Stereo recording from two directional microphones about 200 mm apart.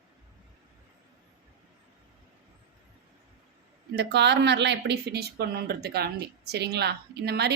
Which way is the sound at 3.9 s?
60° right (ahead or behind).